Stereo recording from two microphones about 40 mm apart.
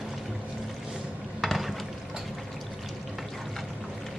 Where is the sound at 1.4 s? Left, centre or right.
Centre.